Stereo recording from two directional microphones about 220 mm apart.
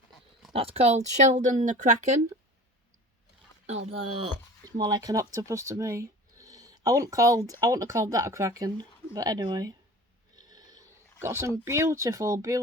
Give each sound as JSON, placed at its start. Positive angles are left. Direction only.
{"t": 0.5, "sound": "a woman's voice", "side_deg": -25}
{"t": 4.2, "sound": "speech", "side_deg": -15}